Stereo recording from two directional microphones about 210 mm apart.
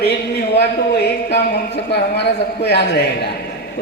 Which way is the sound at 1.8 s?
55° left (ahead or behind).